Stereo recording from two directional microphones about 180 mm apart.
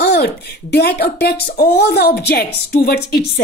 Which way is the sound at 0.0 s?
65° left (ahead or behind).